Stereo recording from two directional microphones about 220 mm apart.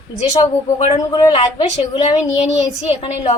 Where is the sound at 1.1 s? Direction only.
25° left (ahead or behind).